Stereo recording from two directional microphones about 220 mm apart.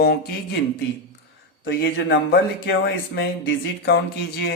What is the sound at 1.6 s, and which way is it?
Speech, 50° left (ahead or behind).